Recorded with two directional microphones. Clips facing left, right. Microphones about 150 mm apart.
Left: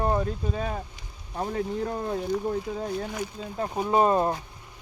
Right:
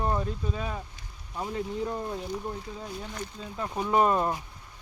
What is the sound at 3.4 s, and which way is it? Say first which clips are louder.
Speech: left 2 dB; 40° left (ahead or behind).